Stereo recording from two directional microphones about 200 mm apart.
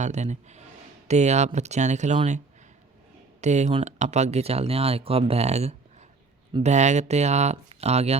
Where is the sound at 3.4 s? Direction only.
35° right (ahead or behind).